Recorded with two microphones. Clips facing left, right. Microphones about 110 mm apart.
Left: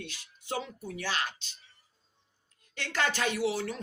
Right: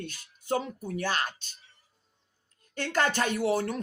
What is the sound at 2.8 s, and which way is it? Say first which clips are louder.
Speech: right 4 dB; 45° right (ahead or behind).